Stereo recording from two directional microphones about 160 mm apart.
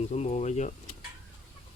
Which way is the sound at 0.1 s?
45° left (ahead or behind).